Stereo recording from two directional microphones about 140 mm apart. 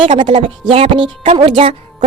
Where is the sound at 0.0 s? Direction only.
35° right (ahead or behind).